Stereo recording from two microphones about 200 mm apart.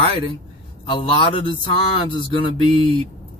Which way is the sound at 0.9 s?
25° left (ahead or behind).